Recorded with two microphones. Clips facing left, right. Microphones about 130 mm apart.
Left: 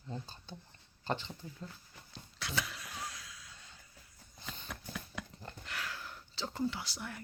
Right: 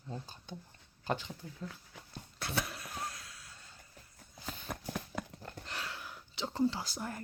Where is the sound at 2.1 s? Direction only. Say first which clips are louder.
Right 2 dB; 50° right (ahead or behind).